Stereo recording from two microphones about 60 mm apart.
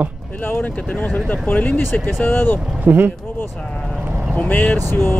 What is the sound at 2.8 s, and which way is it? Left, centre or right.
Speech, right.